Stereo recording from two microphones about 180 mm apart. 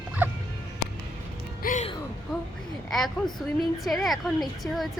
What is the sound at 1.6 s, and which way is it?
Music, 45° left (ahead or behind).